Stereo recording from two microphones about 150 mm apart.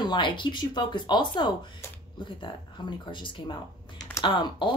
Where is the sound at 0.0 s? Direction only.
30° left (ahead or behind).